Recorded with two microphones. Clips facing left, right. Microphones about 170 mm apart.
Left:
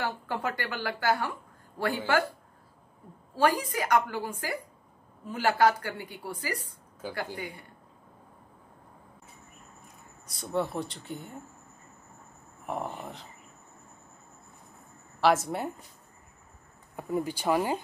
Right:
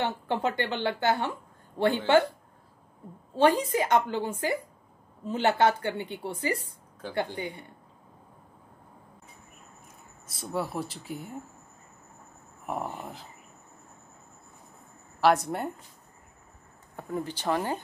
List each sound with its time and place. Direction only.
0.0 s a woman's voice: 20° right (ahead or behind)
3.3 s a woman's voice: 25° right (ahead or behind)
7.0 s speech: 5° left (ahead or behind)
7.3 s a woman's voice: 25° right (ahead or behind)
10.2 s speech: centre (ahead or behind)
12.6 s speech: centre (ahead or behind)
15.1 s speech: centre (ahead or behind)
16.9 s speech: 10° left (ahead or behind)